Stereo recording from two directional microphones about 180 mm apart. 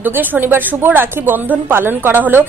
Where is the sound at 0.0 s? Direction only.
10° right (ahead or behind).